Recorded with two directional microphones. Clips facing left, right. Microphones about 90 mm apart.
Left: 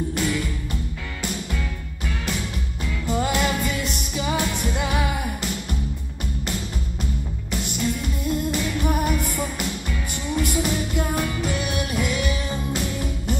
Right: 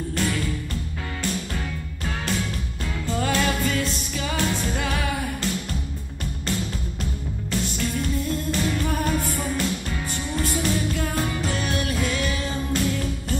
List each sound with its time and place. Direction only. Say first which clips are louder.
0.1 s music: left 1 dB; 20° left (ahead or behind)
3.1 s music: left 1 dB; 20° left (ahead or behind)
7.6 s music: left 3 dB; 15° left (ahead or behind)